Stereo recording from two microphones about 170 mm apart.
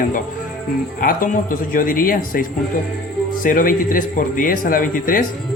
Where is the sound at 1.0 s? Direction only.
55° left (ahead or behind).